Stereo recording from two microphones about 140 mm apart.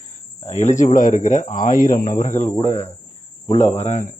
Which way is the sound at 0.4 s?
55° left (ahead or behind).